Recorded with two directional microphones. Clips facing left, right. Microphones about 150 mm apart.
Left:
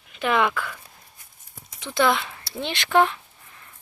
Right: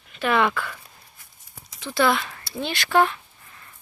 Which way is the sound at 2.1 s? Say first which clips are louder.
Right 1 dB; 10° left (ahead or behind).